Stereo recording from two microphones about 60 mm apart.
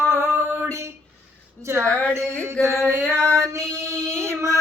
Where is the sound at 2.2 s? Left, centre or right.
Right.